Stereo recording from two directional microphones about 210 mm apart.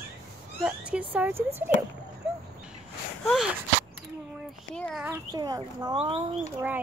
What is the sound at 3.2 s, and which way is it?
Speech, centre (ahead or behind).